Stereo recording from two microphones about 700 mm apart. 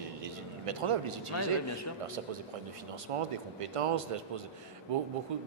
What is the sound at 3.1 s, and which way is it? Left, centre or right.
A man's voice, right.